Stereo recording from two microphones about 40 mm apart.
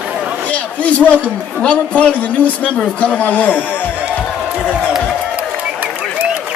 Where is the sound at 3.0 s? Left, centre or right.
Left.